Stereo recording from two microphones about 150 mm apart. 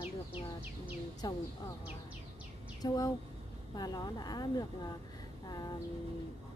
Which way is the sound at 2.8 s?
25° left (ahead or behind).